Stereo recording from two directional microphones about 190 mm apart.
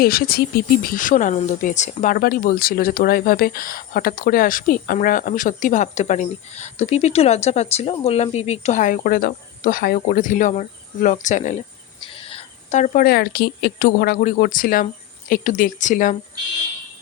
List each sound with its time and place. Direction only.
0.0 s speech: 50° left (ahead or behind)
11.9 s speech: 30° left (ahead or behind)